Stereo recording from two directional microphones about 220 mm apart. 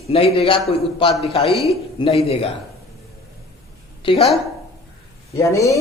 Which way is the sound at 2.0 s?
20° left (ahead or behind).